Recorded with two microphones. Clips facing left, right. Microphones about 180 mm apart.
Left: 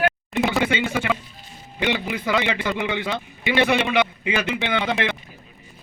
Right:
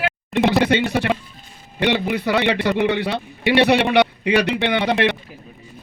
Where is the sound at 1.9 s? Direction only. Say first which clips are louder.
Right 3 dB; 60° right (ahead or behind).